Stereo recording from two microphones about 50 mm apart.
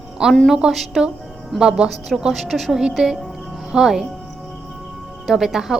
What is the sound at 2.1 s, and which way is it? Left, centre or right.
A woman's voice, centre.